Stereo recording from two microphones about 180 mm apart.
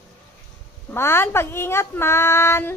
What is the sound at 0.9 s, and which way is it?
Speech, 15° left (ahead or behind).